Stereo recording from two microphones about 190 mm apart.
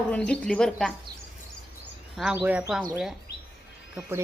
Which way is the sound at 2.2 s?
5° right (ahead or behind).